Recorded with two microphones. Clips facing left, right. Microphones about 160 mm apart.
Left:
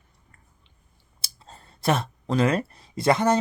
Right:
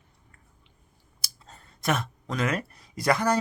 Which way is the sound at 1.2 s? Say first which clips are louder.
Left 3 dB; 30° left (ahead or behind).